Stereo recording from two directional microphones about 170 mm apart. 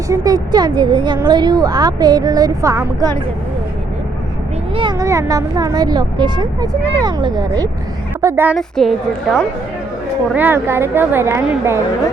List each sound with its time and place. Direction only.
0.1 s a woman's voice: 20° right (ahead or behind)
4.7 s a woman's voice: 25° right (ahead or behind)
8.5 s a woman's voice: centre (ahead or behind)
10.3 s a woman's voice: 10° right (ahead or behind)